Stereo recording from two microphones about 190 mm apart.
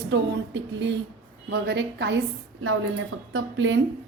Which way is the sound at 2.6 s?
90° right.